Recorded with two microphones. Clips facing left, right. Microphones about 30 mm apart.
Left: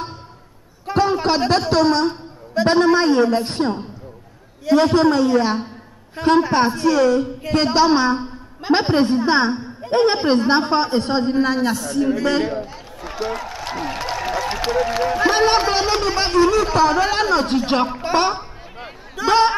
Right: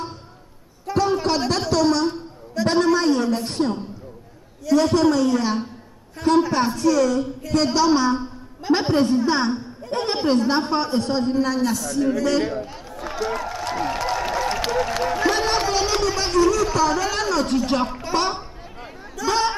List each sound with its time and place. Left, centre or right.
0.8 s a man's voice: left
13.3 s a sound: centre
14.6 s speech: centre
15.2 s a man's voice: left